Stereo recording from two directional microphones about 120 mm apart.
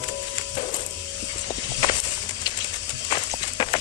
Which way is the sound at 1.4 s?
40° left (ahead or behind).